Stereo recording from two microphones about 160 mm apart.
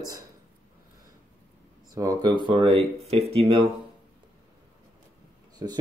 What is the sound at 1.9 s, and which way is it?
Speech, 20° right (ahead or behind).